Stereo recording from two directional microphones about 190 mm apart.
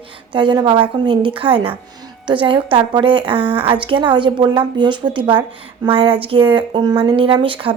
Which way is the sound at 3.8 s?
25° right (ahead or behind).